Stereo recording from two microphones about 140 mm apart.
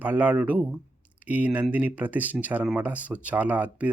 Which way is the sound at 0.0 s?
10° right (ahead or behind).